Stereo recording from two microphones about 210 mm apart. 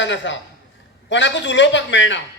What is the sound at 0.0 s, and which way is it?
A man's voice, 60° left (ahead or behind).